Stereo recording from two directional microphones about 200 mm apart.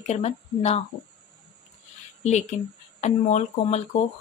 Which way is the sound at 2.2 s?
35° left (ahead or behind).